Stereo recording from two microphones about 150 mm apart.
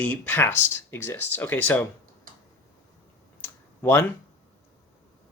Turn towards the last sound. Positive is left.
turn(degrees=15)  # may be behind; listen again after turning